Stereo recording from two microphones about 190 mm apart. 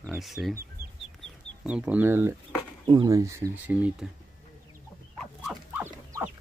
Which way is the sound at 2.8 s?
20° right (ahead or behind).